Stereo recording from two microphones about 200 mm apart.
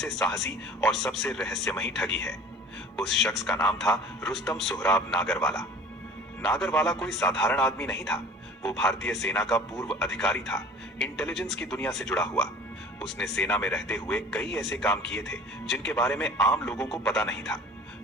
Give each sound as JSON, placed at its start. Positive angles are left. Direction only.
{"t": 0.0, "sound": "speech", "side_deg": 0}